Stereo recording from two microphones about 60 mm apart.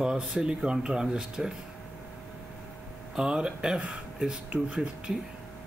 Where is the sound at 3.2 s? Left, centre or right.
Centre.